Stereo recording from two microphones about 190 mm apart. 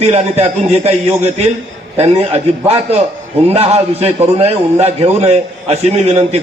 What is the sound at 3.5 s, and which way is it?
A man's voice, 30° right (ahead or behind).